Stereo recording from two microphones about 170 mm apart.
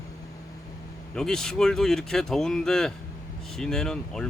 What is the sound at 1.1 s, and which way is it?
Speech, 5° left (ahead or behind).